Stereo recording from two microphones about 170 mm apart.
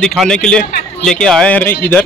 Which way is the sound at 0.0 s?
5° left (ahead or behind).